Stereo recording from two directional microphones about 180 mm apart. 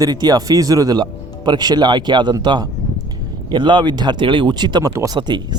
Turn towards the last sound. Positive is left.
turn(degrees=-25)  # may be behind; listen again after turning